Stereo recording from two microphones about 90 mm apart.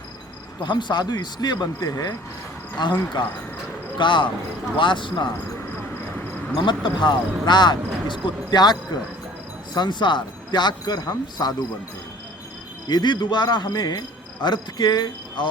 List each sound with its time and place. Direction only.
0.6 s speech: 60° left (ahead or behind); by 2.1 s 45° left (ahead or behind)
2.8 s speech: 55° left (ahead or behind)
6.6 s speech: 60° left (ahead or behind)
12.9 s speech: 50° left (ahead or behind)